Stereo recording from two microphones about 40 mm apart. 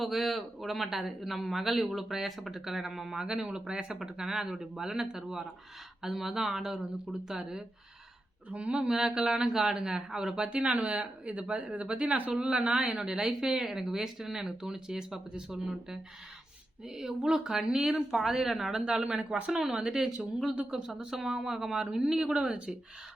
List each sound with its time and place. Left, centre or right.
0.0 s a man's voice: centre
8.4 s speech: right
8.8 s speech: centre; by 12.3 s right
12.4 s speech: right; by 18.8 s centre
19.8 s speech: centre